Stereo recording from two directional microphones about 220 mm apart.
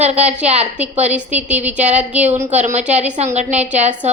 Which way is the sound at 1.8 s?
30° right (ahead or behind).